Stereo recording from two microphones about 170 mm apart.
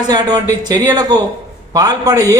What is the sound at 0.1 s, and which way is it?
A man's voice, 25° right (ahead or behind).